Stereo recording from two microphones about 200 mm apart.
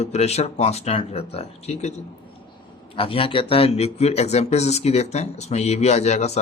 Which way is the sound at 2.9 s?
25° left (ahead or behind).